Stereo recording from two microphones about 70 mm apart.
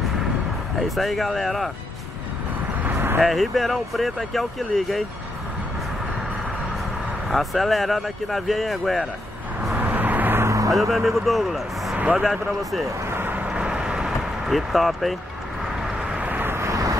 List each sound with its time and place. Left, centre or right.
0.7 s speech: centre
2.8 s vehicle: right
3.2 s speech: centre
7.2 s speech: centre
9.8 s vehicle: right
10.7 s speech: centre
12.8 s vehicle: right
13.5 s vehicle: centre
16.2 s vehicle: right
16.6 s vehicle: right